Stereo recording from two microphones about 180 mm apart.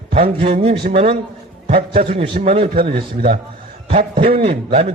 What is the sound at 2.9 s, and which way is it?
A man's voice, 35° right (ahead or behind).